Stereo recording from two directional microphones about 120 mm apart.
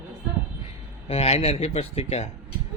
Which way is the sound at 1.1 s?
60° left (ahead or behind).